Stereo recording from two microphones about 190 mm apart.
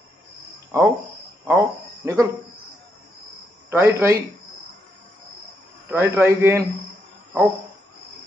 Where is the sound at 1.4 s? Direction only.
15° right (ahead or behind).